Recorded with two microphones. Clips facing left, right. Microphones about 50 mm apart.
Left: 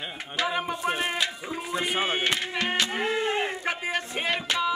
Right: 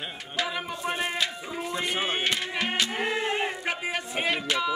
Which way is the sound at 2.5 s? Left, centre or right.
Centre.